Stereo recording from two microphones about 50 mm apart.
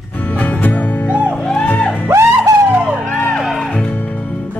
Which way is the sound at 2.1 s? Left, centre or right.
Right.